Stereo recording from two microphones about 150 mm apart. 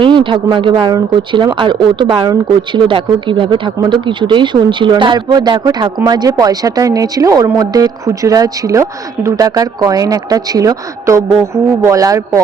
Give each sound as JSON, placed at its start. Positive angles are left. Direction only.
{"t": 0.0, "sound": "speech", "side_deg": -35}